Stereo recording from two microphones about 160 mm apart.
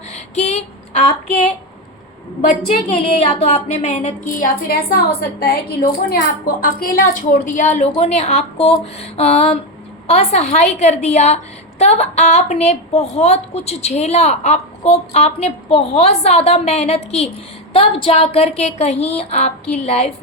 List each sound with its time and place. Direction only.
0.1 s a sound: 45° left (ahead or behind)
2.6 s a woman's voice: 40° left (ahead or behind)
4.4 s a woman's voice: 65° left (ahead or behind); by 20.1 s 45° left (ahead or behind)